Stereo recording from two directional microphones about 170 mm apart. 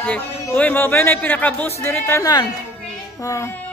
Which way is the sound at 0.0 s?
10° left (ahead or behind).